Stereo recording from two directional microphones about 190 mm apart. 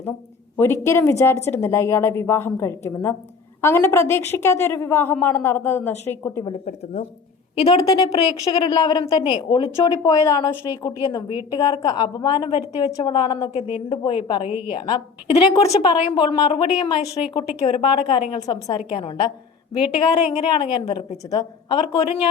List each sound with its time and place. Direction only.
0.5 s a woman's voice: 15° left (ahead or behind)
7.5 s a woman's voice: 30° left (ahead or behind)
7.9 s speech: 20° left (ahead or behind)
14.4 s a woman's voice: 10° right (ahead or behind)
14.7 s speech: 25° left (ahead or behind)